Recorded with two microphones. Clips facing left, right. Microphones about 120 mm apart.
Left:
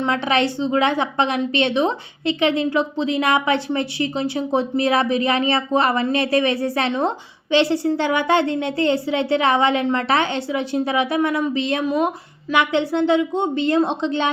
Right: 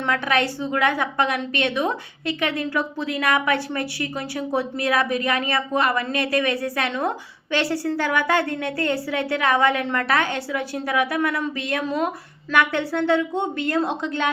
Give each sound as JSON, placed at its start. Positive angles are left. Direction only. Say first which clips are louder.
{"t": 0.0, "sound": "a woman's voice", "louder": "left 3 dB", "side_deg": 25}